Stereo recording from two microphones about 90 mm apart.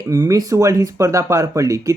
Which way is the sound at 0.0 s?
40° right (ahead or behind).